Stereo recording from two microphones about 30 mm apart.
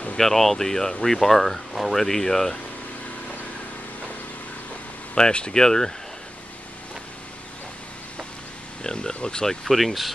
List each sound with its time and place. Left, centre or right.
0.2 s speech: centre
5.2 s speech: left
9.0 s speech: left
9.7 s speech: centre